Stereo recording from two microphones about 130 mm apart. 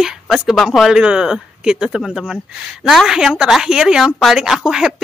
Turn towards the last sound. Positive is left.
turn(degrees=-5)  # may be behind; listen again after turning